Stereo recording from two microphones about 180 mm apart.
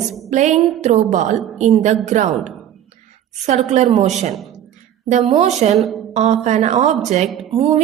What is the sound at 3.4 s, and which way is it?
A woman's voice, 40° right (ahead or behind).